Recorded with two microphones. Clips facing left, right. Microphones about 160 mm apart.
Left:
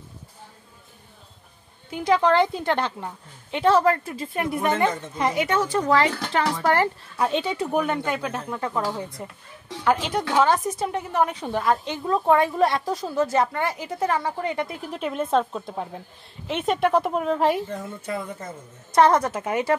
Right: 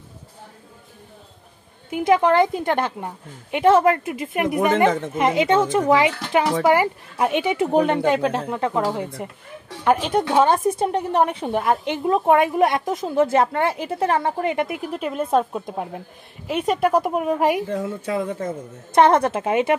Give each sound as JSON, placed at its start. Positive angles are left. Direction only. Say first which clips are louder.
{"t": 1.9, "sound": "a woman's voice", "louder": "right 3 dB", "side_deg": -15}
{"t": 7.7, "sound": "a woman's voice", "louder": "right 7 dB", "side_deg": -30}
{"t": 11.4, "sound": "a woman's voice", "louder": "right 3 dB", "side_deg": -20}
{"t": 14.9, "sound": "a woman's voice", "louder": "right 2 dB", "side_deg": -5}
{"t": 17.7, "sound": "a woman's voice", "louder": "right 6 dB", "side_deg": -90}
{"t": 18.9, "sound": "a woman's voice", "louder": "right 2 dB", "side_deg": -25}